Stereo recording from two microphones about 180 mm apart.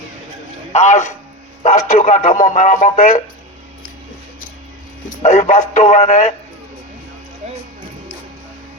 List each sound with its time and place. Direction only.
0.7 s speech: 40° left (ahead or behind)
5.0 s speech: 40° left (ahead or behind)